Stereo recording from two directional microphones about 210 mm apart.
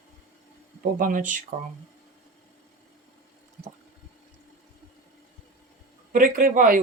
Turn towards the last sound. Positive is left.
turn(degrees=-40)  # may be behind; listen again after turning